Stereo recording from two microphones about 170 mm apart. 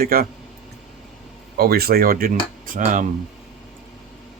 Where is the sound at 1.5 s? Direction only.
65° right (ahead or behind); by 3.1 s 45° right (ahead or behind).